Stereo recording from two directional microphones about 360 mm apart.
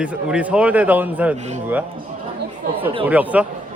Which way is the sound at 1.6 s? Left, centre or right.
Centre.